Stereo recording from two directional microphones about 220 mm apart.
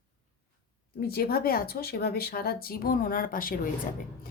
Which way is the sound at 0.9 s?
45° left (ahead or behind).